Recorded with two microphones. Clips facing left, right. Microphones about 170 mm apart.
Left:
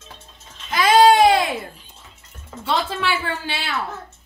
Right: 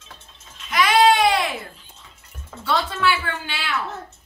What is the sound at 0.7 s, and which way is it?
Goat, 35° left (ahead or behind).